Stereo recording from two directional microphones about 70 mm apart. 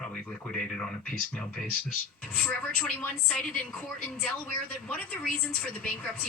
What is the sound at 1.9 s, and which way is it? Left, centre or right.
A woman's voice, centre.